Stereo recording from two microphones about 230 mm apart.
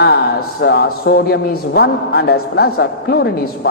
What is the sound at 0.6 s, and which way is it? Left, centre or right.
Music, left.